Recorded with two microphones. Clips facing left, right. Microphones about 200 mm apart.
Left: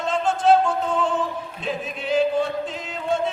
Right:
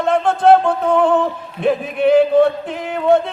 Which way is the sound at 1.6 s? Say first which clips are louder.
Right 13 dB; 60° right (ahead or behind).